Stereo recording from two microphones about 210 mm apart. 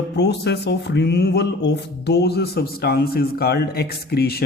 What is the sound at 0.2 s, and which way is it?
Speech, 55° left (ahead or behind).